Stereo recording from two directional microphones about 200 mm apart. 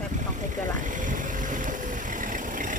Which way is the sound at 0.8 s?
40° right (ahead or behind).